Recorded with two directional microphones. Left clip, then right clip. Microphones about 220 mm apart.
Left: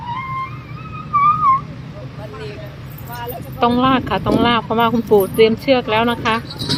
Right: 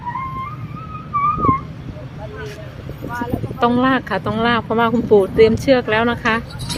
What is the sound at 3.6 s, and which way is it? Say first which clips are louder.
Speech: left 1 dB; 5° right (ahead or behind).